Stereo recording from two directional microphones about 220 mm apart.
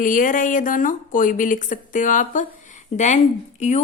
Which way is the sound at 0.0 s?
35° left (ahead or behind).